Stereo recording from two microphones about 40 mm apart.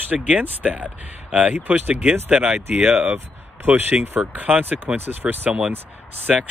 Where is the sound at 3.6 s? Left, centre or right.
Right.